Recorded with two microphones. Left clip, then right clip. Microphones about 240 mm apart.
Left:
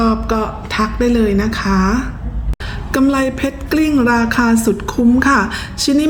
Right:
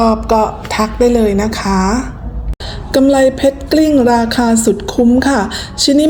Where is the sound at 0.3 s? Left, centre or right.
Left.